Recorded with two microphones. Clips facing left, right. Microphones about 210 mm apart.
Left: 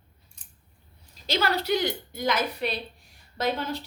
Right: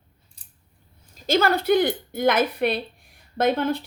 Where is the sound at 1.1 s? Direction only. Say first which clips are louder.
Right 6 dB; 50° right (ahead or behind).